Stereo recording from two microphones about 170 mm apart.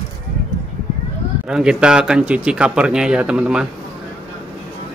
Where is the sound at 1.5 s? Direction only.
5° right (ahead or behind).